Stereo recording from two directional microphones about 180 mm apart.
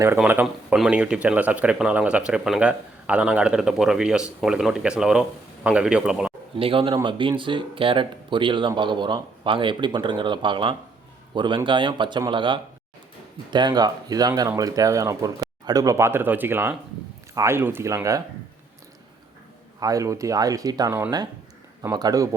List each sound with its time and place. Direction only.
0.0 s speech: 10° right (ahead or behind)
6.6 s speech: 30° right (ahead or behind)
19.8 s speech: 20° right (ahead or behind)